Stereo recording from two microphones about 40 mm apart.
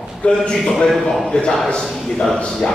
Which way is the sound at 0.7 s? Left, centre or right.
Centre.